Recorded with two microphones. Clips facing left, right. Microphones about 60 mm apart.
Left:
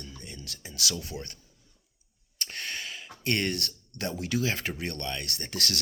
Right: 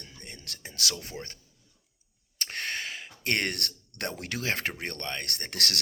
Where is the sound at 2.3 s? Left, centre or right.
Right.